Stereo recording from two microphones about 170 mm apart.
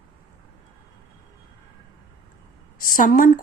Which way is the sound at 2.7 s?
55° left (ahead or behind).